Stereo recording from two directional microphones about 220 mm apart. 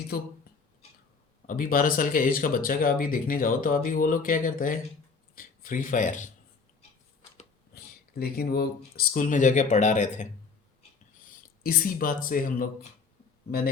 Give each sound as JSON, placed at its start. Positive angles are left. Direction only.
{"t": 1.5, "sound": "speech", "side_deg": 40}
{"t": 8.1, "sound": "speech", "side_deg": 45}
{"t": 11.3, "sound": "speech", "side_deg": 40}